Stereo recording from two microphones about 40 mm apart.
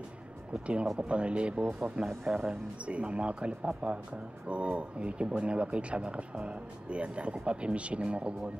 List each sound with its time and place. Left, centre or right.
0.5 s speech: right